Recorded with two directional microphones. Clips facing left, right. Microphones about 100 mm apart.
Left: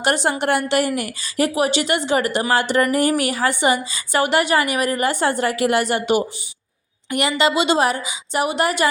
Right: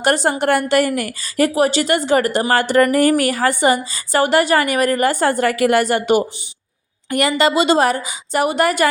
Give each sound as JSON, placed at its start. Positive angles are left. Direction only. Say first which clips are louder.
{"t": 0.0, "sound": "a woman's voice", "louder": "right 3 dB", "side_deg": -40}